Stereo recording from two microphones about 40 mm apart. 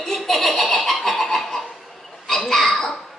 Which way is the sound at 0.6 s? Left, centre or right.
Centre.